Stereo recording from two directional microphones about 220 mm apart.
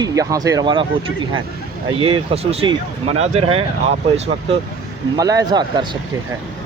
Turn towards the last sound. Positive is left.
turn(degrees=-20)  # may be behind; listen again after turning